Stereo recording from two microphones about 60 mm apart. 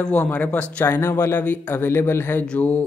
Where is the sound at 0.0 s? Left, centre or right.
Left.